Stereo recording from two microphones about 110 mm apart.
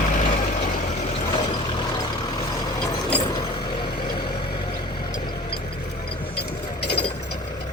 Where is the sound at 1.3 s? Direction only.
40° left (ahead or behind).